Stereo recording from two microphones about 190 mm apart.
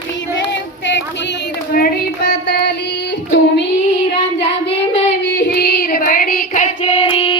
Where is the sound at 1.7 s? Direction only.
55° left (ahead or behind).